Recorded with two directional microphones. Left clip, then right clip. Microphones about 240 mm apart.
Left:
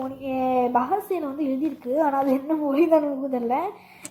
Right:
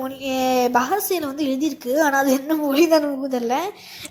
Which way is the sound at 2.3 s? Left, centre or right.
Right.